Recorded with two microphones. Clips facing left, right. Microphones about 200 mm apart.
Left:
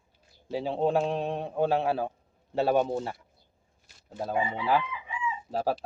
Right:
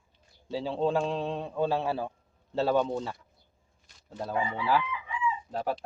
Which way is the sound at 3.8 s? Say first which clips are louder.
Left 2 dB; 5° left (ahead or behind).